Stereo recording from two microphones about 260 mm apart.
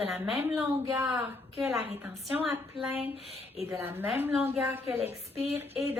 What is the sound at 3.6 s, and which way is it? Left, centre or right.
A woman's voice, centre.